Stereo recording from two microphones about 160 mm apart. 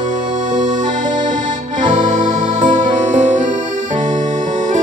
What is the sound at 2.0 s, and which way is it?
Music, 50° right (ahead or behind).